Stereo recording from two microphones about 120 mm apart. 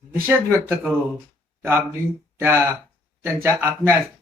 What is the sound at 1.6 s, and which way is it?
A man's voice, 20° right (ahead or behind).